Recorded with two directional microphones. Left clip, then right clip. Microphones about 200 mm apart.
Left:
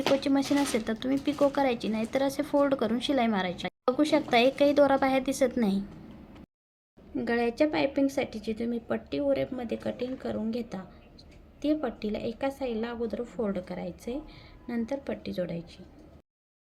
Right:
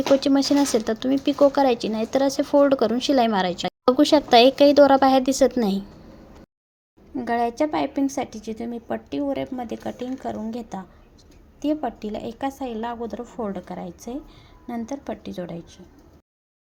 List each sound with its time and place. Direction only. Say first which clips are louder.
0.2 s speech: right 7 dB; 20° right (ahead or behind)
7.2 s a woman's voice: right 4 dB; 10° right (ahead or behind)